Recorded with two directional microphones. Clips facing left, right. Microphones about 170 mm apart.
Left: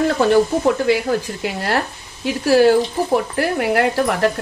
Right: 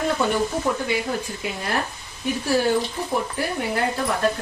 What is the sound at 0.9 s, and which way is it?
Speech, 90° left.